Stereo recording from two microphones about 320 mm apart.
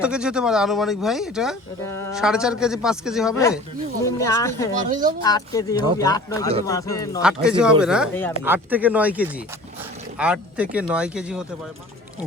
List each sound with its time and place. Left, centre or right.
0.0 s speech: centre
2.1 s speech: centre
4.0 s speech: centre
4.9 s speech: right
5.2 s speech: centre
7.2 s speech: centre